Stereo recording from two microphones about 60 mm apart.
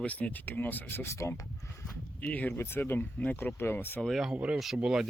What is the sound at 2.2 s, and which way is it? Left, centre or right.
Speech, left.